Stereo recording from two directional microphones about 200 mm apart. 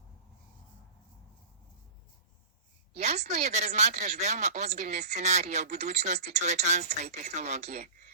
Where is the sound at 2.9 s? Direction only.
35° right (ahead or behind).